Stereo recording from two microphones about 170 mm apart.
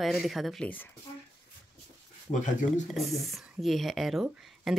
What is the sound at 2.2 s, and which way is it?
Speech, 45° left (ahead or behind).